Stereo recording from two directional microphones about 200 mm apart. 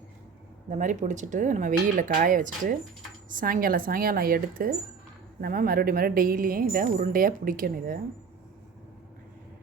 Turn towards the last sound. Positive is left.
turn(degrees=-45)  # may be behind; listen again after turning